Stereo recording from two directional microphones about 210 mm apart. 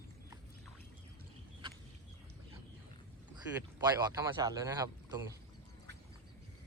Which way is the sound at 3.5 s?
20° right (ahead or behind).